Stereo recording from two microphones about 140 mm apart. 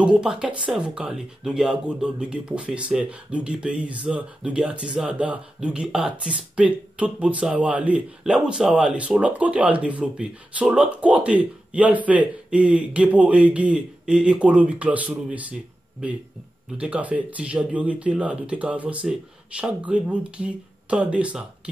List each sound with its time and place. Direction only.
0.0 s speech: 5° right (ahead or behind)
16.7 s speech: 10° right (ahead or behind)